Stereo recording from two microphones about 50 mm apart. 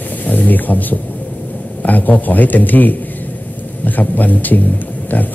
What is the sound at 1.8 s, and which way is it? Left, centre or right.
Speech, left.